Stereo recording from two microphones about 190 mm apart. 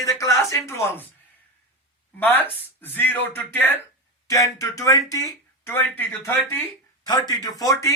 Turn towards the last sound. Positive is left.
turn(degrees=20)  # may be behind; listen again after turning